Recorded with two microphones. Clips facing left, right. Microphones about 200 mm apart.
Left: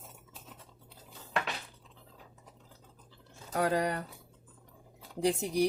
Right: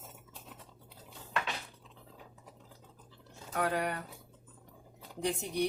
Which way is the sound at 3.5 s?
35° left (ahead or behind).